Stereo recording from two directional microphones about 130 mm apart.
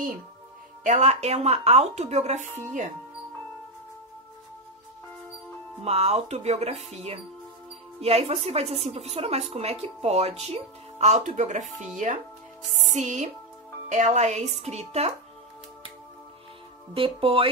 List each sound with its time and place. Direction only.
0.8 s speech: 60° right (ahead or behind)
5.9 s a woman's voice: 55° right (ahead or behind)
16.9 s a woman's voice: 45° right (ahead or behind)